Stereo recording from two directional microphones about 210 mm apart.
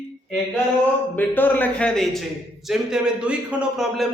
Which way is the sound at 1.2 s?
10° left (ahead or behind).